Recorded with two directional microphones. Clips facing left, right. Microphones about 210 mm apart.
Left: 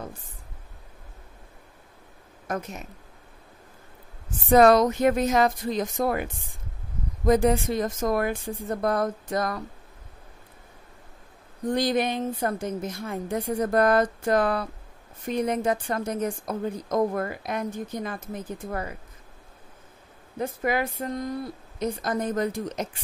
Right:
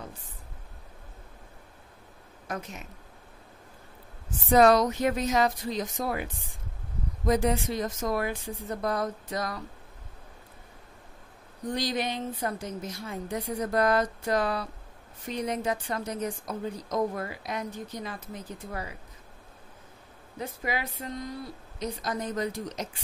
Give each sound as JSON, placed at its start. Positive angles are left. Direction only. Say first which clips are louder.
{"t": 2.4, "sound": "speech", "louder": "left 5 dB", "side_deg": 45}
{"t": 4.5, "sound": "a woman's voice", "louder": "left 3 dB", "side_deg": 55}
{"t": 11.6, "sound": "a woman's voice", "louder": "left 6 dB", "side_deg": 50}
{"t": 20.3, "sound": "a woman's voice", "louder": "left 7 dB", "side_deg": 50}